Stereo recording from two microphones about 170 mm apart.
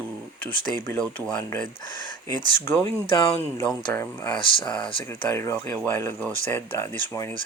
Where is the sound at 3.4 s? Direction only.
15° left (ahead or behind).